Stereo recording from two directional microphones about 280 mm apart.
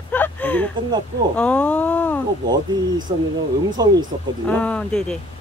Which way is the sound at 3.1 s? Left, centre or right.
Centre.